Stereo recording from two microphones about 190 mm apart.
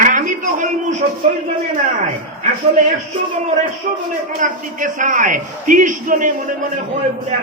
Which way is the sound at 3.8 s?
45° right (ahead or behind).